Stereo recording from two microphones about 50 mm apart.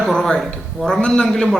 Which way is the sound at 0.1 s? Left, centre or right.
Centre.